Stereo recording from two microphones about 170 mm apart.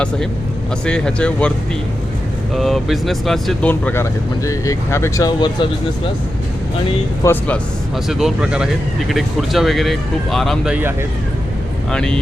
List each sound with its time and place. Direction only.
0.9 s speech: 5° left (ahead or behind)
2.6 s speech: centre (ahead or behind); by 5.6 s 25° left (ahead or behind)
7.2 s speech: 10° left (ahead or behind)
8.0 s speech: 5° right (ahead or behind)
11.9 s speech: 5° left (ahead or behind)